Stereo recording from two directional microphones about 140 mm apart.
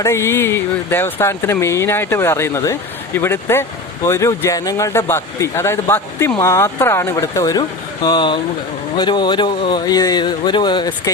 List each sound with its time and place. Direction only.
0.0 s speech: 20° left (ahead or behind)